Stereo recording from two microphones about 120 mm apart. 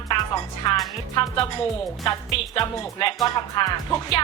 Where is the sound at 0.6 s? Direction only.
40° left (ahead or behind).